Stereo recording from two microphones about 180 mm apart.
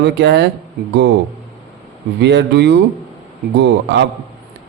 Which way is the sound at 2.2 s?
75° right (ahead or behind).